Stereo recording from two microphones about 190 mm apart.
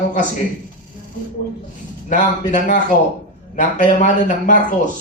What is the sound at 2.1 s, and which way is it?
Speech, 40° left (ahead or behind).